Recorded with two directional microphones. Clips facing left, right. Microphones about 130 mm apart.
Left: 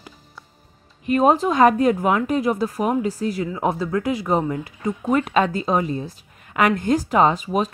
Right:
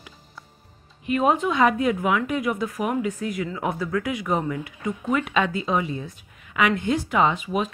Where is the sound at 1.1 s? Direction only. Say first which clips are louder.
Left 4 dB; 35° left (ahead or behind).